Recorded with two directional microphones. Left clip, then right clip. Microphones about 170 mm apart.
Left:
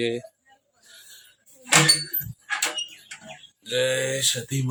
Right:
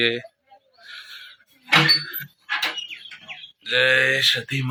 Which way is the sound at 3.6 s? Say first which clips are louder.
Right 6 dB; 15° left (ahead or behind).